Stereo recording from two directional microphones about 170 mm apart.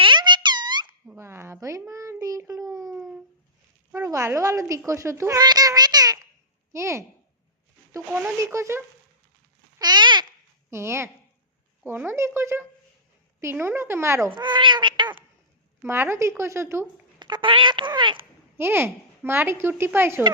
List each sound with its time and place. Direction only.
0.0 s a sound: 25° right (ahead or behind)
1.0 s a sound: 15° right (ahead or behind)
3.9 s a woman's voice: 15° right (ahead or behind)
8.1 s a child's voice: 10° right (ahead or behind)
9.7 s babbling: 25° right (ahead or behind)
10.7 s a child's voice: 15° right (ahead or behind)
14.3 s a sound: 25° right (ahead or behind)
15.8 s a child's voice: 15° right (ahead or behind)
17.2 s speech: 25° right (ahead or behind)
18.5 s a child's voice: 15° right (ahead or behind)